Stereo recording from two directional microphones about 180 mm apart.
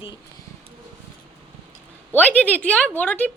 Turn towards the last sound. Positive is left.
turn(degrees=10)  # may be behind; listen again after turning